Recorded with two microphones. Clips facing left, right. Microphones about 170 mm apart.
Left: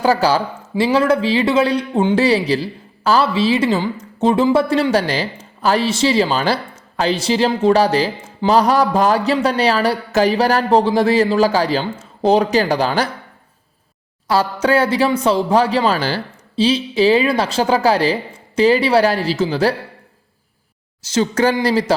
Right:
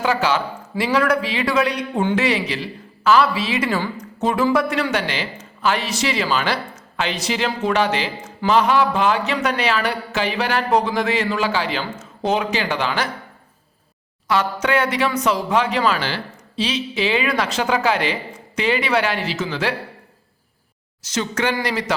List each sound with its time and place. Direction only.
0.0 s a man's voice: 35° left (ahead or behind)
14.3 s speech: 35° left (ahead or behind)
21.0 s speech: 30° left (ahead or behind)